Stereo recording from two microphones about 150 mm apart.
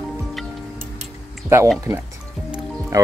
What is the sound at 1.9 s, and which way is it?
Speech, 20° right (ahead or behind).